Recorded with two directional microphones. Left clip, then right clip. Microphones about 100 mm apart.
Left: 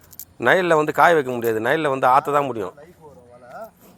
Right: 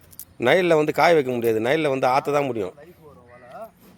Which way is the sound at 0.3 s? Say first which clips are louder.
Left 1 dB; 35° right (ahead or behind).